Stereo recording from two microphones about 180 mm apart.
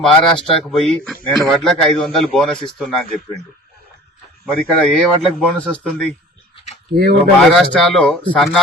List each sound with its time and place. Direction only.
0.0 s a man's voice: centre (ahead or behind)
4.6 s a man's voice: 5° left (ahead or behind)
6.9 s speech: 60° right (ahead or behind)
7.5 s a man's voice: centre (ahead or behind)